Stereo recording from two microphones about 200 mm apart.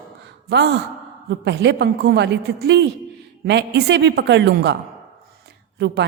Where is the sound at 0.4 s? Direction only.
55° right (ahead or behind).